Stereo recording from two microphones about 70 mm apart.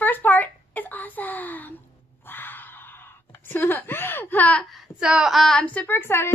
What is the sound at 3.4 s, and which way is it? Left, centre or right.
A woman's voice, left.